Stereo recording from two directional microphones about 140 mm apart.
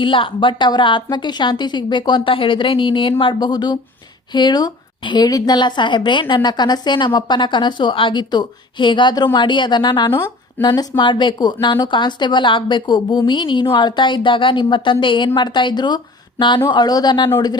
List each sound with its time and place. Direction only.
0.0 s a woman's voice: 40° left (ahead or behind)